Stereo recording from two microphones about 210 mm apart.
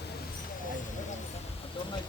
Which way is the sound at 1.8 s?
25° left (ahead or behind).